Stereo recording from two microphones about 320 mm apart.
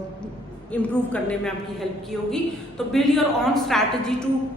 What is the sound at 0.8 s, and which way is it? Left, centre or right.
A woman's voice, centre.